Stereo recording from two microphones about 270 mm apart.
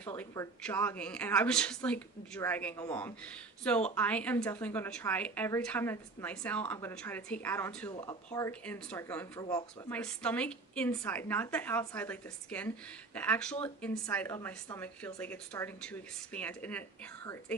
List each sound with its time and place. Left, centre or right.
0.0 s speech: centre